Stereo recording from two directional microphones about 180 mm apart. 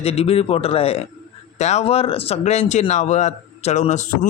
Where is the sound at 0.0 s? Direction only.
35° left (ahead or behind).